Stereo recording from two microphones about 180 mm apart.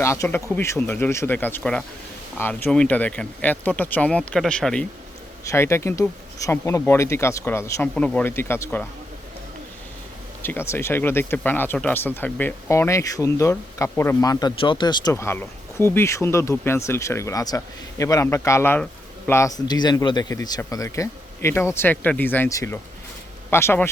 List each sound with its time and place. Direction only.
0.0 s speech: 15° left (ahead or behind)
10.4 s speech: 10° left (ahead or behind)
15.1 s speech: 15° left (ahead or behind)